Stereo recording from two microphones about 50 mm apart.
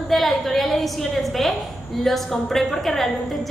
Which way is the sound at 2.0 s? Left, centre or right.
Centre.